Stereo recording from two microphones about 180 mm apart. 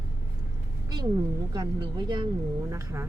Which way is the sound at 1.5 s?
25° right (ahead or behind).